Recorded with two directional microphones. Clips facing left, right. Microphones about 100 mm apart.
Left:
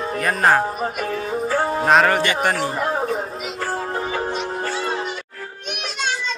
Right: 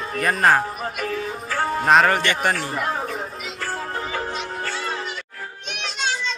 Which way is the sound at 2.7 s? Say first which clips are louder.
Left 4 dB; 30° left (ahead or behind).